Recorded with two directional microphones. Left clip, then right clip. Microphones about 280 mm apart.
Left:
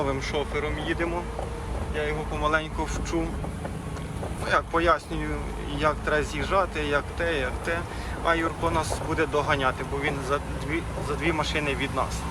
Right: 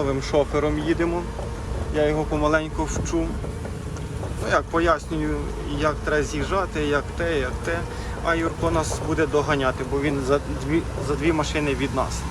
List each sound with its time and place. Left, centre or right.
0.0 s speech: centre
4.4 s speech: centre